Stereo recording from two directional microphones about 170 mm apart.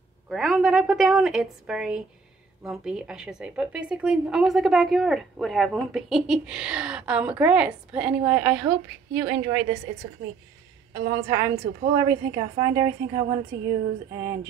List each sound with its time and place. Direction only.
0.3 s a woman's voice: centre (ahead or behind)
10.9 s a woman's voice: 20° right (ahead or behind)